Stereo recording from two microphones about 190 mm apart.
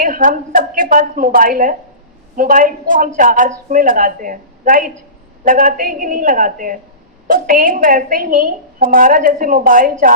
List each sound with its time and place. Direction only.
0.0 s a woman's voice: 45° right (ahead or behind)